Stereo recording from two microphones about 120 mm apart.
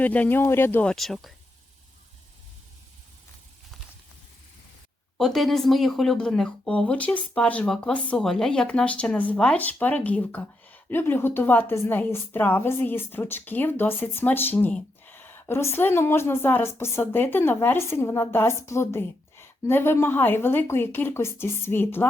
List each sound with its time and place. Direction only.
0.0 s speech: 15° left (ahead or behind)
0.9 s speech: centre (ahead or behind)
5.1 s speech: centre (ahead or behind); by 22.0 s 20° left (ahead or behind)